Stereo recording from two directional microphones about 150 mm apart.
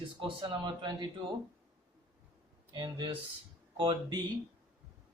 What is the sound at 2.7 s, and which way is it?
Speech, 35° right (ahead or behind).